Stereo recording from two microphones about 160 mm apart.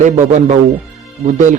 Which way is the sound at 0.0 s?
50° right (ahead or behind).